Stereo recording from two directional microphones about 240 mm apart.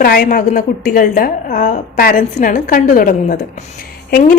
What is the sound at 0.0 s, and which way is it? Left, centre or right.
Speech, left.